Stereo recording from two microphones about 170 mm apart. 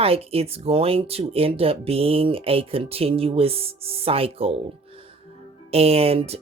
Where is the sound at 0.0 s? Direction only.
35° right (ahead or behind).